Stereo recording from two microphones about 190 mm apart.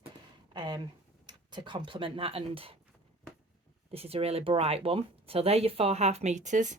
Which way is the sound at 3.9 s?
30° right (ahead or behind).